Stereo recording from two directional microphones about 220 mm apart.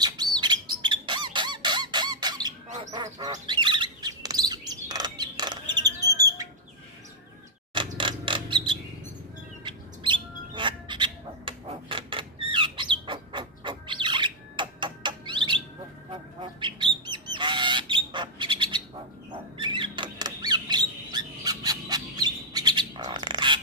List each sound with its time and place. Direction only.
0.0 s squeak: 20° right (ahead or behind)
2.9 s chirp: 20° right (ahead or behind)
6.1 s bird: 15° right (ahead or behind)
8.0 s mechanisms: 20° right (ahead or behind)
9.7 s bird: 20° right (ahead or behind)
19.5 s a sound: 20° right (ahead or behind)